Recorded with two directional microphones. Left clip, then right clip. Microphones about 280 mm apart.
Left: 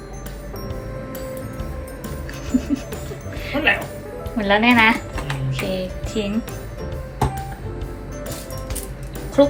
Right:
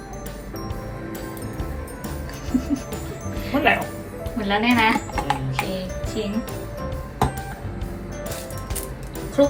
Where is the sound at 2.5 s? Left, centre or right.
Centre.